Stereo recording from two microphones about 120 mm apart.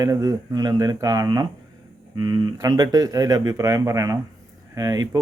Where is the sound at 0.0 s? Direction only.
25° right (ahead or behind).